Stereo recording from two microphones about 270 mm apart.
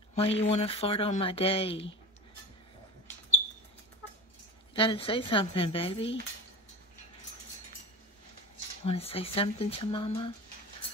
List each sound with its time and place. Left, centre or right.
0.1 s speech: left
4.7 s speech: centre
8.8 s speech: left